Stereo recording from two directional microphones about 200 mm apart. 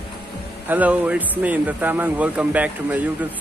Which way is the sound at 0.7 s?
5° right (ahead or behind).